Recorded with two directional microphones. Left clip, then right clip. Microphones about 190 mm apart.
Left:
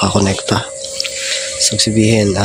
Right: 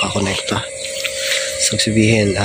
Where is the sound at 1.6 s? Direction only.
10° left (ahead or behind).